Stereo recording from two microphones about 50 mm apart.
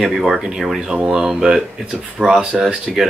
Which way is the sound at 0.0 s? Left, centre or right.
Centre.